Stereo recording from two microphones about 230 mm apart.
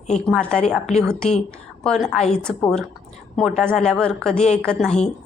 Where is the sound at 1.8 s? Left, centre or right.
Centre.